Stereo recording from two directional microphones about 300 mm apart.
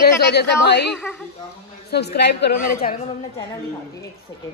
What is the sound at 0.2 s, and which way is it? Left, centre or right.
Speech, left.